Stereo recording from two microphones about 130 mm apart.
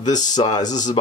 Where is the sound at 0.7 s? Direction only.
70° left (ahead or behind).